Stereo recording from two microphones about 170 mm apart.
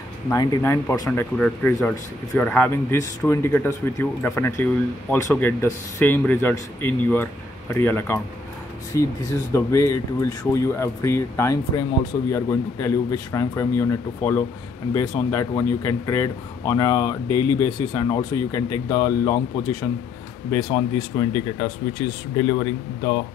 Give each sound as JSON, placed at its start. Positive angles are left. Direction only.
{"t": 0.3, "sound": "speech", "side_deg": 20}
{"t": 1.4, "sound": "speech", "side_deg": 5}